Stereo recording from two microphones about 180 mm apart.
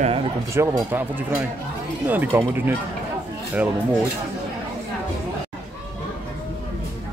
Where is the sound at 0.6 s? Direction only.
15° right (ahead or behind).